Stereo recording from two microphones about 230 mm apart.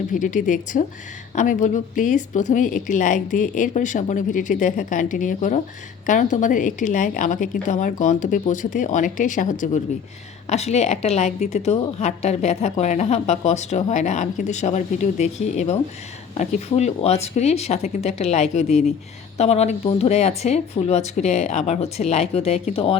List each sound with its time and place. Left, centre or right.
0.1 s a woman's voice: left